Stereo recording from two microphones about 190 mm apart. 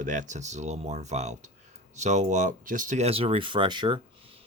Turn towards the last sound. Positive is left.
turn(degrees=-25)  # may be behind; listen again after turning